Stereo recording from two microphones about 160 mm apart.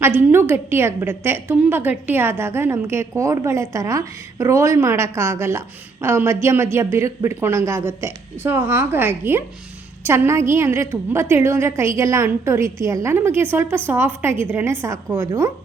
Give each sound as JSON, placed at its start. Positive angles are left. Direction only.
{"t": 0.0, "sound": "a woman's voice", "side_deg": -15}